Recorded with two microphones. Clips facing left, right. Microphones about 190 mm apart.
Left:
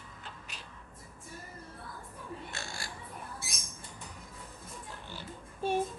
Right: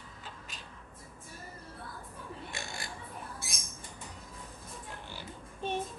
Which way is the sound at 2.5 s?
20° right (ahead or behind).